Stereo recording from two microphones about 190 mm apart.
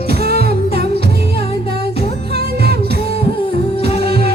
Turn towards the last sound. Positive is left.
turn(degrees=-55)  # may be behind; listen again after turning